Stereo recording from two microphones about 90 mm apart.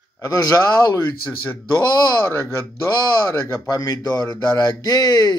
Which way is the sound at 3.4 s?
35° left (ahead or behind).